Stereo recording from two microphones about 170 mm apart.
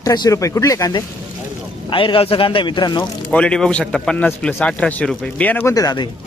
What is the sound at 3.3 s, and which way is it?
A man's voice, 5° left (ahead or behind).